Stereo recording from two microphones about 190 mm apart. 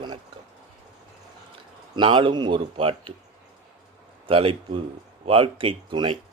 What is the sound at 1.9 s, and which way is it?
A man's voice, 25° right (ahead or behind).